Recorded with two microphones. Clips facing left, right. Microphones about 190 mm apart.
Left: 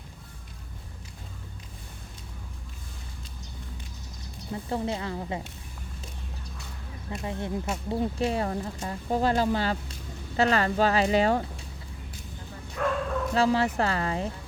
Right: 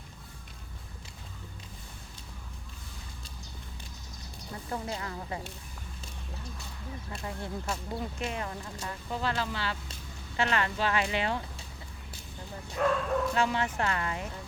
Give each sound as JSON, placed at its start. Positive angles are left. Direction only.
{"t": 4.7, "sound": "speech", "side_deg": 25}
{"t": 7.1, "sound": "speech", "side_deg": 20}
{"t": 12.8, "sound": "bow-wow", "side_deg": -10}
{"t": 13.3, "sound": "speech", "side_deg": 35}